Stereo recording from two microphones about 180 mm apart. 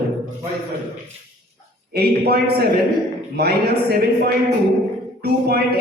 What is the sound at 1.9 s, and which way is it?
A man's voice, 60° right (ahead or behind).